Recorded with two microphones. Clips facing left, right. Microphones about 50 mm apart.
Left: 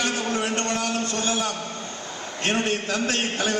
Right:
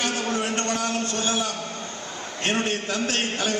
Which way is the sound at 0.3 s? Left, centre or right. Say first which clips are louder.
Even; left.